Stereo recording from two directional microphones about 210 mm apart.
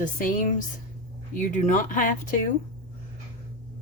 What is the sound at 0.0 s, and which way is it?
Speech, 40° left (ahead or behind).